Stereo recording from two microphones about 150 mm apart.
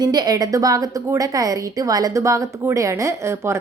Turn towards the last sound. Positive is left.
turn(degrees=-20)  # may be behind; listen again after turning